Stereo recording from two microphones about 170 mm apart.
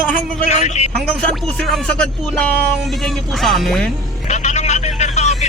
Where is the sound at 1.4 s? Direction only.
Centre (ahead or behind).